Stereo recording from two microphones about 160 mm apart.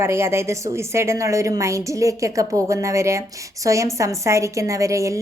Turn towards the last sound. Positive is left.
turn(degrees=-20)  # may be behind; listen again after turning